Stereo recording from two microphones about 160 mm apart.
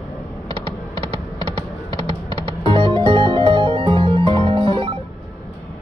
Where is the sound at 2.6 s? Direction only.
35° right (ahead or behind).